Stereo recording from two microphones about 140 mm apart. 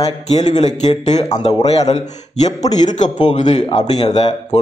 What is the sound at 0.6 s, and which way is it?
A man's voice, 55° left (ahead or behind).